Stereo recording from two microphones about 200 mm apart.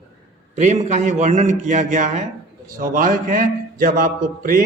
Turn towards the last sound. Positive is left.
turn(degrees=-45)  # may be behind; listen again after turning